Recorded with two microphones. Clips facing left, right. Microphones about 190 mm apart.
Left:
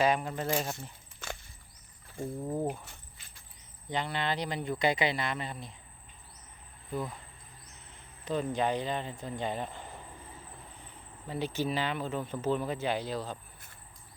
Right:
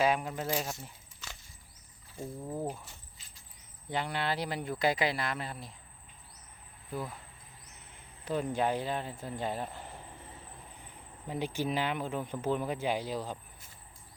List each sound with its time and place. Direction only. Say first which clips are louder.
0.0 s speech: left 1 dB; 5° right (ahead or behind)
1.2 s a sound: left 9 dB; 55° left (ahead or behind)
2.5 s speech: left 3 dB; 15° left (ahead or behind)
2.8 s insect: left 1 dB; 60° left (ahead or behind)
3.8 s speech: left 1 dB; 10° right (ahead or behind)
6.9 s speech: left 2 dB; 5° right (ahead or behind)
8.2 s speech: left 1 dB; 10° right (ahead or behind)
11.3 s speech: left 1 dB; 10° right (ahead or behind)